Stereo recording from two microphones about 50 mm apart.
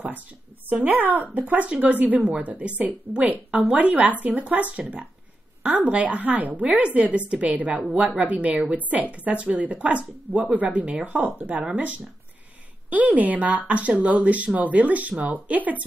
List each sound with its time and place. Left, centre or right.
0.8 s a woman's voice: right